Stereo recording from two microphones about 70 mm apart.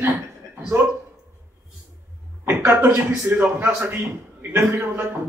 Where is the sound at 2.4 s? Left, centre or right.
Right.